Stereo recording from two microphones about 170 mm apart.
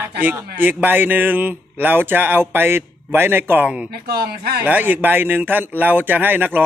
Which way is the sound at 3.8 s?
65° right (ahead or behind).